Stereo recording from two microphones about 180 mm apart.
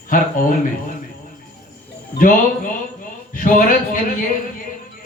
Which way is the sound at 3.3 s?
50° left (ahead or behind).